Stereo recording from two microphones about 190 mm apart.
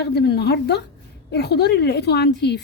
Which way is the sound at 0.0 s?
60° left (ahead or behind).